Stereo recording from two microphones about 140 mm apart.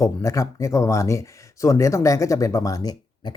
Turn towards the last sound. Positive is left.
turn(degrees=30)  # may be behind; listen again after turning